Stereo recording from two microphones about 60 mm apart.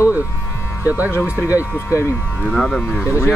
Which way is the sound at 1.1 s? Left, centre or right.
Left.